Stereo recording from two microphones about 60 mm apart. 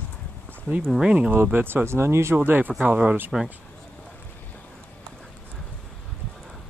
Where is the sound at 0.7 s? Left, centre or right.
Right.